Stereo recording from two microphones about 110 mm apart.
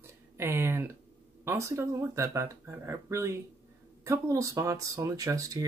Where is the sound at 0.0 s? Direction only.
25° right (ahead or behind).